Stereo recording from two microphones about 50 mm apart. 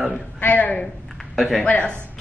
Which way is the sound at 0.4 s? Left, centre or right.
Left.